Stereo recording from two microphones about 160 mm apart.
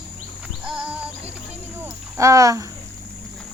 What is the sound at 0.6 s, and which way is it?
Music, 5° right (ahead or behind).